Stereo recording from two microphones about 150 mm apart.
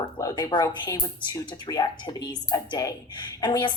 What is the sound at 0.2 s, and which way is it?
A woman's voice, 25° left (ahead or behind).